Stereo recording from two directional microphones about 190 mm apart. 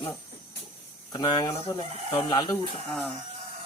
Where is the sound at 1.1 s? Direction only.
20° left (ahead or behind).